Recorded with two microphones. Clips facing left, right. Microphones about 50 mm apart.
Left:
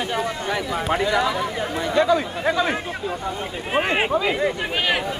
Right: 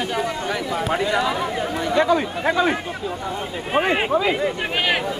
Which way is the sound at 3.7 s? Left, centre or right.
Centre.